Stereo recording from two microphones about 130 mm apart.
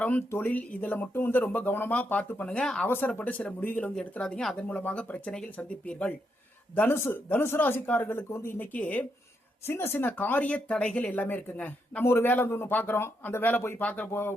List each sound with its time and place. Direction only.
0.0 s speech: 10° left (ahead or behind)